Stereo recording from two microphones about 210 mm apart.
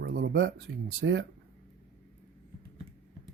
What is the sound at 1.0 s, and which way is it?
Speech, 55° right (ahead or behind).